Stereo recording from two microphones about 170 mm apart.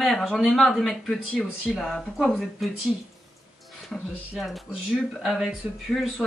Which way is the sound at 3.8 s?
Centre (ahead or behind).